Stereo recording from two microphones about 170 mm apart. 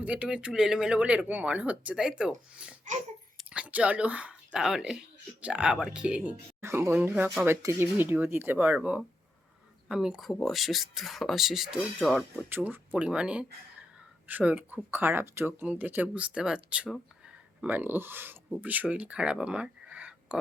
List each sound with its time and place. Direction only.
0.0 s speech: 10° right (ahead or behind)